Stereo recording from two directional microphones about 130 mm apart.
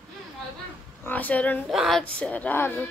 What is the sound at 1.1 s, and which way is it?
Speech, 10° left (ahead or behind).